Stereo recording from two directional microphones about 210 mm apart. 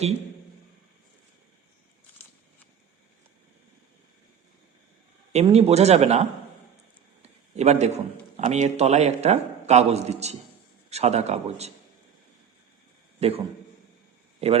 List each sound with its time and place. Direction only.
5.3 s a man's voice: 30° right (ahead or behind)
13.1 s a man's voice: 30° right (ahead or behind)